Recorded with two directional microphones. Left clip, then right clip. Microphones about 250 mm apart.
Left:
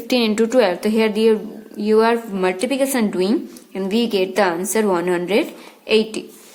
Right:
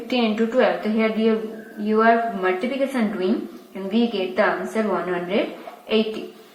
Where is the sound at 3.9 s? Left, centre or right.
Left.